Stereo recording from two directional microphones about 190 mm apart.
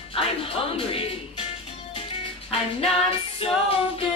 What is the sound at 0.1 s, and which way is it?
Music, 30° left (ahead or behind).